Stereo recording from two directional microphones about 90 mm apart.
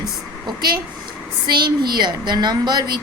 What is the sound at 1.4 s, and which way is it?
A woman's voice, 55° right (ahead or behind).